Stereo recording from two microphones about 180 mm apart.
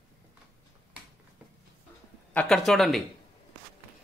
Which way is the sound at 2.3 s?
5° left (ahead or behind).